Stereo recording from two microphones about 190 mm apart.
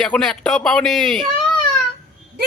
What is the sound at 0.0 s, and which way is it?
A man's voice, centre (ahead or behind).